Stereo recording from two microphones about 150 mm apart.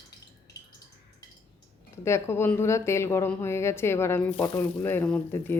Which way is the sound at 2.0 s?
20° left (ahead or behind).